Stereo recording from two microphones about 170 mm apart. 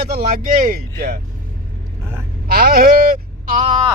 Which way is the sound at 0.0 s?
65° right (ahead or behind).